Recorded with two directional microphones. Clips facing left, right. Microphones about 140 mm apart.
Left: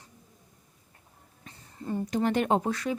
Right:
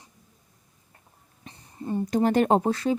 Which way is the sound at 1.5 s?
20° right (ahead or behind).